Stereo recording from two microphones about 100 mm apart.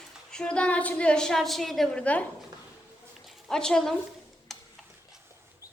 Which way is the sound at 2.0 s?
15° left (ahead or behind).